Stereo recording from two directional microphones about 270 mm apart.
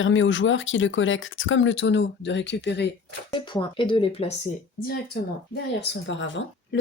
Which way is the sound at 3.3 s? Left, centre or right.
Centre.